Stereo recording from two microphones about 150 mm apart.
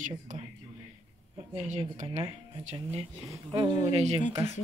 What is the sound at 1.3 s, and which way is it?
Speech, 50° right (ahead or behind).